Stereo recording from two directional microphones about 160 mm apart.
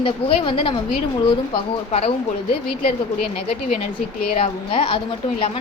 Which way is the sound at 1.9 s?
40° left (ahead or behind).